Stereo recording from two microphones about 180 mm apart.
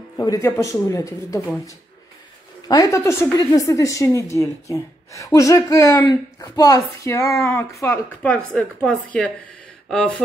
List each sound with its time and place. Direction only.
0.2 s a woman's voice: 20° left (ahead or behind)
2.7 s a woman's voice: 20° left (ahead or behind); by 10.1 s 5° left (ahead or behind)